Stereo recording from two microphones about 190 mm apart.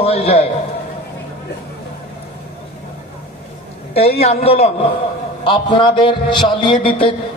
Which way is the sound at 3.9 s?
30° left (ahead or behind).